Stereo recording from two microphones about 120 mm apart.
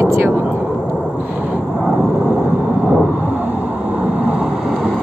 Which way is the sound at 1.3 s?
15° right (ahead or behind).